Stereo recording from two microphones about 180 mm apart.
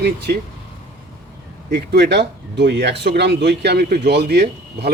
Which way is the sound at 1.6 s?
65° right (ahead or behind).